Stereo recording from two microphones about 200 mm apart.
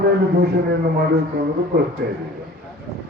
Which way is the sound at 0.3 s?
50° right (ahead or behind).